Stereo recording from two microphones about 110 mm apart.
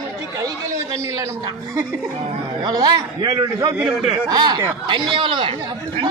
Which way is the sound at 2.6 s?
40° right (ahead or behind).